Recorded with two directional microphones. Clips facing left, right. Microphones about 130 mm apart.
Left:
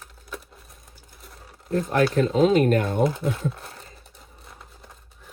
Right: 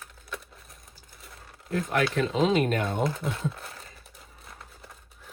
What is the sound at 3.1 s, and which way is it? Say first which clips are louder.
Speech: left 4 dB; centre (ahead or behind).